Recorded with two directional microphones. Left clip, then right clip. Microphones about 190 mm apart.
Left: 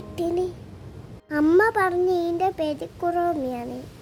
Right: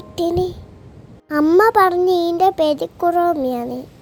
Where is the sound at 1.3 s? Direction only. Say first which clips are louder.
Right 6 dB; 20° right (ahead or behind).